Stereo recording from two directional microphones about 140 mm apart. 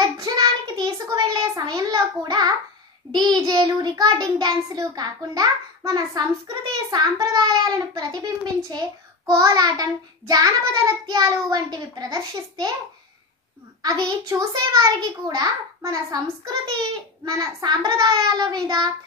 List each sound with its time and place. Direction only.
0.0 s child singing: 30° right (ahead or behind)
3.1 s a child's voice: 30° right (ahead or behind)
13.8 s a child's voice: 30° right (ahead or behind)